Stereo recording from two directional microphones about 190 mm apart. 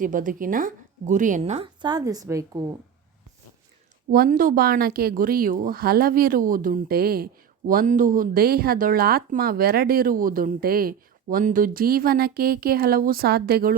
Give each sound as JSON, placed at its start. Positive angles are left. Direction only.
{"t": 0.0, "sound": "speech", "side_deg": -45}
{"t": 1.8, "sound": "a woman's voice", "side_deg": -20}
{"t": 4.1, "sound": "speech", "side_deg": -45}